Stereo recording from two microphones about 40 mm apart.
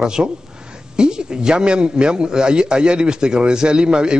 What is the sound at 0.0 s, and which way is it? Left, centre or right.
A man's voice, centre.